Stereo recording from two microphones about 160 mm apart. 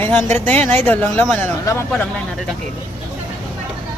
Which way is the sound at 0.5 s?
40° right (ahead or behind).